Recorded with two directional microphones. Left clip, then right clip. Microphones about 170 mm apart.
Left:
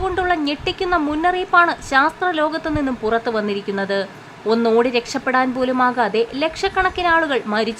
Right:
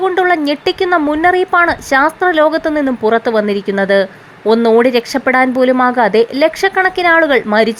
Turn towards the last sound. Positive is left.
turn(degrees=-35)  # may be behind; listen again after turning